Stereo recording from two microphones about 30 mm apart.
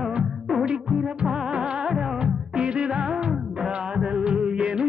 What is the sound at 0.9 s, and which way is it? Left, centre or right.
Music, right.